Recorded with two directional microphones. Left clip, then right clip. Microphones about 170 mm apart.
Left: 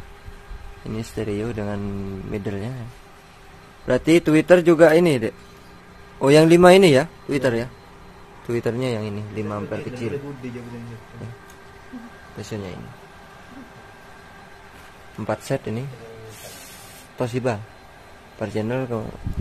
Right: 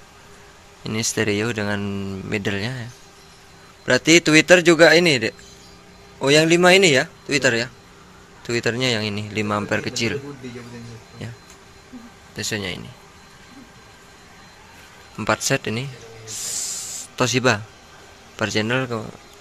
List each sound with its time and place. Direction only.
0.8 s speech: centre (ahead or behind)
3.8 s a man's voice: 10° left (ahead or behind)
6.2 s a man's voice: 30° left (ahead or behind); by 9.5 s centre (ahead or behind)
9.5 s a man's voice: 10° right (ahead or behind)
12.4 s speech: centre (ahead or behind)
15.1 s speech: centre (ahead or behind)
17.2 s speech: centre (ahead or behind)